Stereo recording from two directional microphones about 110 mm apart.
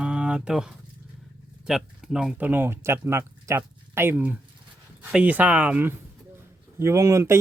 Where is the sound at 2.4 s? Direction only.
20° right (ahead or behind).